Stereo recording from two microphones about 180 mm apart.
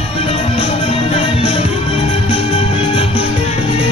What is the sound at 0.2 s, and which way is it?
Music, 35° left (ahead or behind).